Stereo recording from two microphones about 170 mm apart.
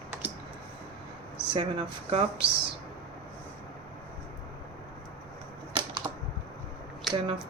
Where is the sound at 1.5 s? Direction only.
30° right (ahead or behind).